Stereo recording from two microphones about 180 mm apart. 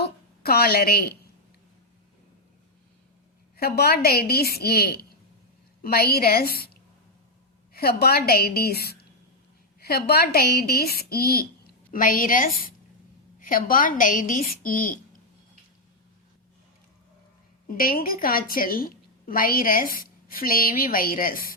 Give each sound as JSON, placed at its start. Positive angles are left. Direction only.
{"t": 0.0, "sound": "a sound", "side_deg": 60}
{"t": 3.6, "sound": "a woman's voice", "side_deg": 60}
{"t": 7.7, "sound": "a woman's voice", "side_deg": 60}
{"t": 17.7, "sound": "a woman's voice", "side_deg": 55}